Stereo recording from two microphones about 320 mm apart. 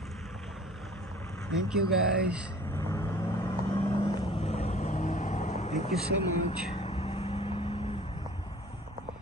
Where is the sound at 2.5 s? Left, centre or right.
Centre.